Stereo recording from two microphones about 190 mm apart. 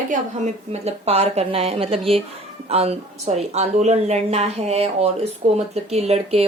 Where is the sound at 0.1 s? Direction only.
35° right (ahead or behind).